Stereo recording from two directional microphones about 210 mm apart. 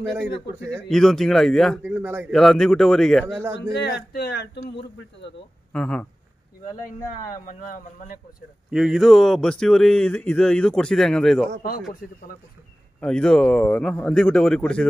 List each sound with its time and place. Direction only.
0.6 s speech: 10° right (ahead or behind)
0.8 s speech: centre (ahead or behind)
2.3 s speech: centre (ahead or behind)
3.7 s speech: 50° left (ahead or behind)
5.7 s speech: 5° left (ahead or behind)
7.2 s speech: 40° left (ahead or behind)
8.6 s speech: centre (ahead or behind)
13.0 s speech: 5° left (ahead or behind)